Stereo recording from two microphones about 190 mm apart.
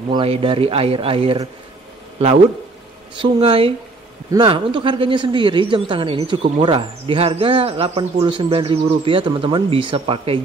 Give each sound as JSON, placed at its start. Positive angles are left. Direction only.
{"t": 0.1, "sound": "speech", "side_deg": -30}
{"t": 3.2, "sound": "speech", "side_deg": -30}